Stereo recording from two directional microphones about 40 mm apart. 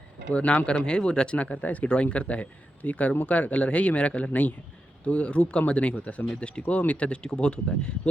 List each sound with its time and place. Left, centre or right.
0.3 s speech: left